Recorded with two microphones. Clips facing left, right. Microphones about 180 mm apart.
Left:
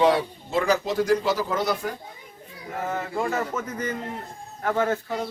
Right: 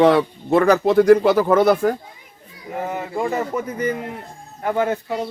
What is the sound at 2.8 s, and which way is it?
Speech, 15° right (ahead or behind).